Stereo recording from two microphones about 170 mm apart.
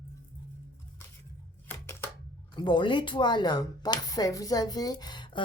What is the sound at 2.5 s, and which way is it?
Speech, 25° left (ahead or behind).